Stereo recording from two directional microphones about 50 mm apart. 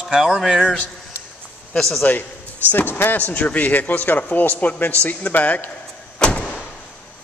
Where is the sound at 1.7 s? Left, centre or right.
Centre.